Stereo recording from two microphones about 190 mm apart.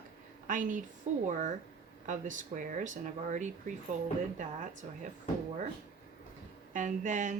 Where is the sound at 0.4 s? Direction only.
45° right (ahead or behind).